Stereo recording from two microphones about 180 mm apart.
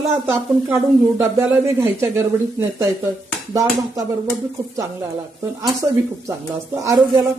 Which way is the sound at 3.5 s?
20° right (ahead or behind).